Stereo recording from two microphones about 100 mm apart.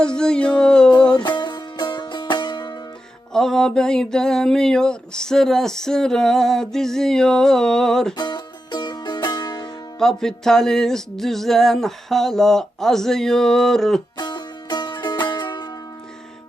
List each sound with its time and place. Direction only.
0.0 s speech: 10° left (ahead or behind)
1.1 s music: 50° left (ahead or behind)
3.3 s mantra: 5° left (ahead or behind)
8.1 s music: 50° left (ahead or behind)
10.0 s mantra: 5° left (ahead or behind)
14.2 s music: 45° left (ahead or behind)